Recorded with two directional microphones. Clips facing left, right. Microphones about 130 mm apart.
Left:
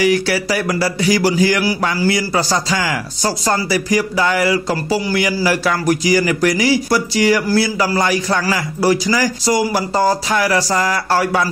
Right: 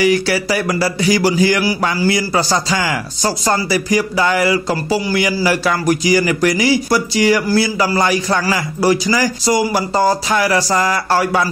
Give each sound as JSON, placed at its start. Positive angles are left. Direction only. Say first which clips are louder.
{"t": 0.0, "sound": "speech", "louder": "right 1 dB", "side_deg": -25}